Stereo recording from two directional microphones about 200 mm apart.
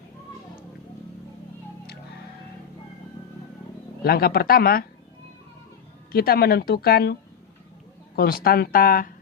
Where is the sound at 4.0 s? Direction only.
50° left (ahead or behind).